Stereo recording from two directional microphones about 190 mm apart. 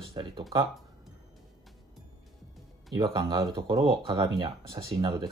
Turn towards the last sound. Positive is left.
turn(degrees=-20)  # may be behind; listen again after turning